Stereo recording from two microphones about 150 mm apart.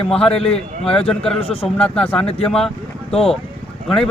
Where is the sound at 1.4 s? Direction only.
40° left (ahead or behind).